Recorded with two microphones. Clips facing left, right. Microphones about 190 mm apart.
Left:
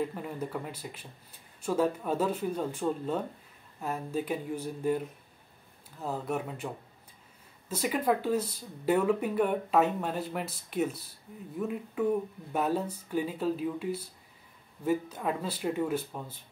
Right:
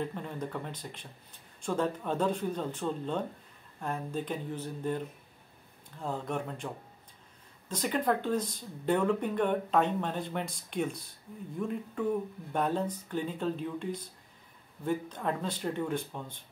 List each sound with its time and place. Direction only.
0.0 s speech: 5° left (ahead or behind)